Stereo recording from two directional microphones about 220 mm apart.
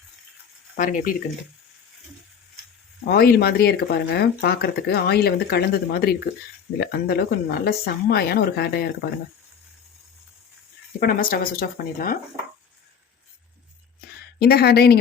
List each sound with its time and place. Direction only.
0.8 s speech: 40° left (ahead or behind)
3.0 s speech: 45° left (ahead or behind)
11.0 s speech: 40° left (ahead or behind)
14.3 s speech: 45° left (ahead or behind)